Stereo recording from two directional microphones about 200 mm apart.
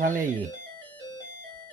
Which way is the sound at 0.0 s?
40° right (ahead or behind).